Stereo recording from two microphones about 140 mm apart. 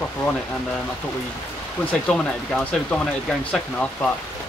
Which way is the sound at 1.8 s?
10° left (ahead or behind).